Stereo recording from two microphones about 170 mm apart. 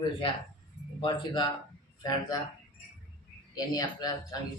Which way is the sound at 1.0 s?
30° left (ahead or behind).